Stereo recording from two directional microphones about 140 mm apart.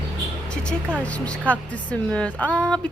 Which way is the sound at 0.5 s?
5° left (ahead or behind).